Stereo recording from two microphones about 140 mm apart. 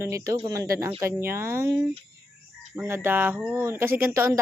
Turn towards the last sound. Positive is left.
turn(degrees=-20)  # may be behind; listen again after turning